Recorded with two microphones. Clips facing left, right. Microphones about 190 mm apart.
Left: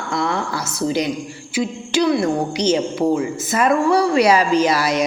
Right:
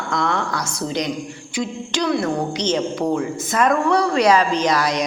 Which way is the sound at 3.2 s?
5° left (ahead or behind).